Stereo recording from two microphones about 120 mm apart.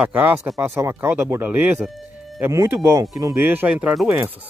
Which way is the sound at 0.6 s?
20° right (ahead or behind).